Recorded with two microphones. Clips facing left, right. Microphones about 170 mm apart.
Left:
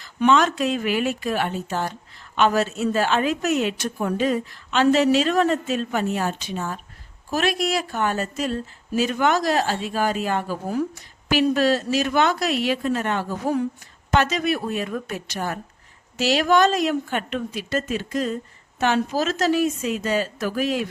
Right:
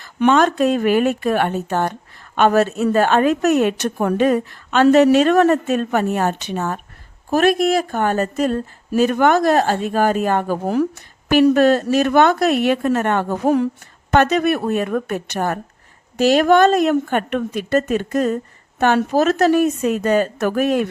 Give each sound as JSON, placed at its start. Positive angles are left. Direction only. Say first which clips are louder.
{"t": 0.0, "sound": "speech", "louder": "right 4 dB", "side_deg": -55}
{"t": 7.3, "sound": "a woman's voice", "louder": "right 8 dB", "side_deg": -50}